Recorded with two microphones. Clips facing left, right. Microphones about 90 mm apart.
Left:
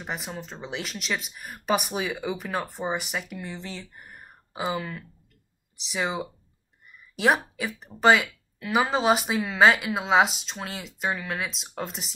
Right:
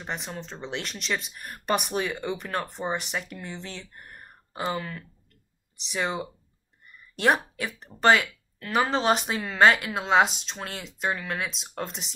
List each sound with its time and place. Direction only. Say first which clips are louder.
0.0 s speech: even; 5° left (ahead or behind)